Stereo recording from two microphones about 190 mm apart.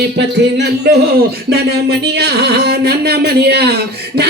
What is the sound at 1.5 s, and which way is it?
Speech, 60° right (ahead or behind).